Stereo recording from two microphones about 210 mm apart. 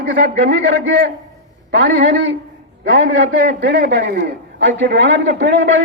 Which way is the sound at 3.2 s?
55° right (ahead or behind).